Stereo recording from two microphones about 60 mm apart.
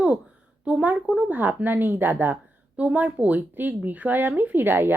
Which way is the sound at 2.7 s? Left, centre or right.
Right.